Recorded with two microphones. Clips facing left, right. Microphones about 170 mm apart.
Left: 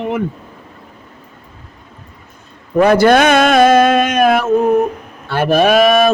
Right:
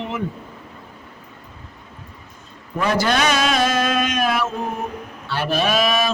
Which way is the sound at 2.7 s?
60° left (ahead or behind).